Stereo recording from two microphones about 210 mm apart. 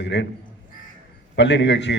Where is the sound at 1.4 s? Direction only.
55° left (ahead or behind).